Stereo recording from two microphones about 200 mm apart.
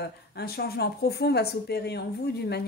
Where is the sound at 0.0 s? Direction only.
55° left (ahead or behind).